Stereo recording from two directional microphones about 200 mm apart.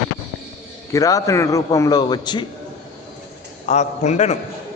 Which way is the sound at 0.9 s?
15° left (ahead or behind).